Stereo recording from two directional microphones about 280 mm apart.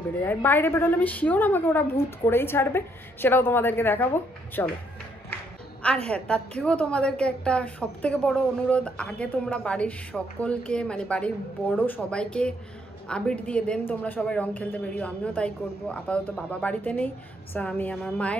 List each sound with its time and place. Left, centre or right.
0.2 s a woman's voice: centre
6.0 s a woman's voice: centre